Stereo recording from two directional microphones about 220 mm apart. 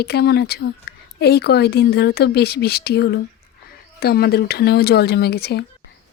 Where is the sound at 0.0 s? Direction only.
45° left (ahead or behind).